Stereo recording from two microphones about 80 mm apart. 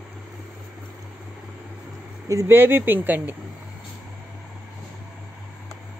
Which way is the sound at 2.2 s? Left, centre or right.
Right.